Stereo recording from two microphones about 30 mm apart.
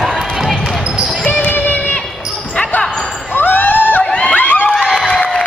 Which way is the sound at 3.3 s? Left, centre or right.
Left.